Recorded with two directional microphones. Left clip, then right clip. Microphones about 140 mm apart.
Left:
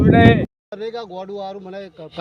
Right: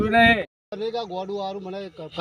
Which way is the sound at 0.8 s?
10° right (ahead or behind).